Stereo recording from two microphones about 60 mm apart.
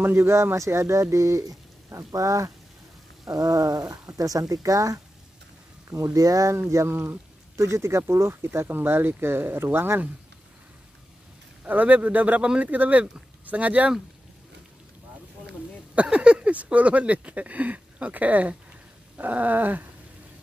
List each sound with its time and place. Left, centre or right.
0.0 s speech: right
3.3 s speech: right
6.7 s speech: right
11.6 s speech: right
15.9 s speech: right